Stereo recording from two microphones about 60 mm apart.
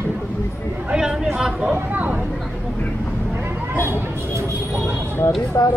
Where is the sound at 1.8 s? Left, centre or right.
Right.